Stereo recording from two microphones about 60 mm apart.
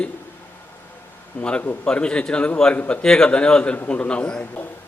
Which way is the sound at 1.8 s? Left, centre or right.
Centre.